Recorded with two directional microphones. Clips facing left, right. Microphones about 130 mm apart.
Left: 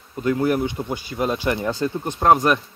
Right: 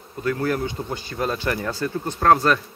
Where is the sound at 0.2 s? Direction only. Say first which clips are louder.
Left 3 dB; 20° left (ahead or behind).